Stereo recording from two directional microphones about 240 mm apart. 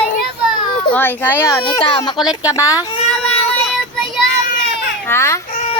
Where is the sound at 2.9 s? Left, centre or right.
Left.